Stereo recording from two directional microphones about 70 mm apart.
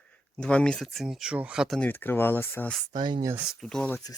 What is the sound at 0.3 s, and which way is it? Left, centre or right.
Speech, centre.